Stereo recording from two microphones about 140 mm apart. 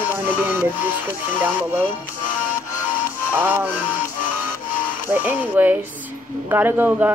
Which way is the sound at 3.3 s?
15° right (ahead or behind).